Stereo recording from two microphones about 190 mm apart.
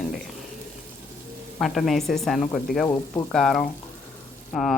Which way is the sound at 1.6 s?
Centre (ahead or behind).